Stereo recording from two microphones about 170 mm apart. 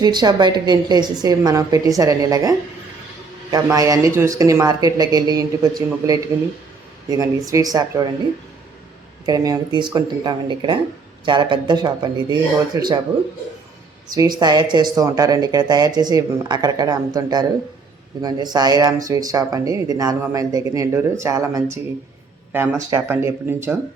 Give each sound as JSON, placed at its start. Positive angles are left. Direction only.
{"t": 0.0, "sound": "speech", "side_deg": -25}
{"t": 9.2, "sound": "speech", "side_deg": -20}
{"t": 14.1, "sound": "speech", "side_deg": -20}